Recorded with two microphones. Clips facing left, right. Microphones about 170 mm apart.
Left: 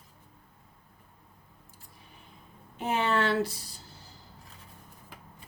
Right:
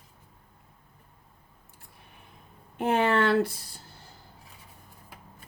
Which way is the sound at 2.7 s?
55° right (ahead or behind).